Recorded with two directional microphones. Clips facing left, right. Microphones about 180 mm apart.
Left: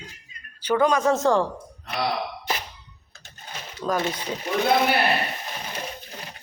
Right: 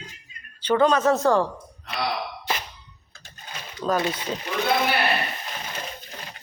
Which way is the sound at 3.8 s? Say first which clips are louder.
Right 2 dB; 10° left (ahead or behind).